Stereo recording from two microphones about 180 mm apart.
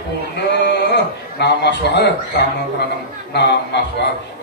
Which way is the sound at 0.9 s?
70° left (ahead or behind).